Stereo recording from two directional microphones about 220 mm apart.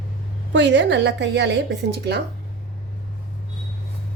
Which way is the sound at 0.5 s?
55° right (ahead or behind).